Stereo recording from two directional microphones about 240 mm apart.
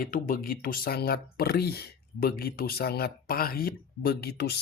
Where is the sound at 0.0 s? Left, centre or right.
Left.